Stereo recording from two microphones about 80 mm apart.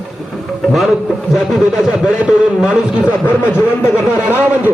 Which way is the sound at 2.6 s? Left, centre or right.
Centre.